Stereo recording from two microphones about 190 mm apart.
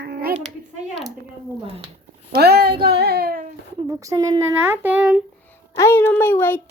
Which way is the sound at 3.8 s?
15° right (ahead or behind).